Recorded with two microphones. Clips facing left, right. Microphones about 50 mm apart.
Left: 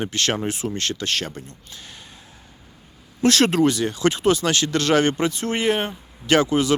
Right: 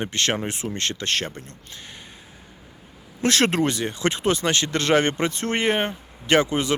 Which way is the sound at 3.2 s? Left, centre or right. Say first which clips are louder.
Left 3 dB; right.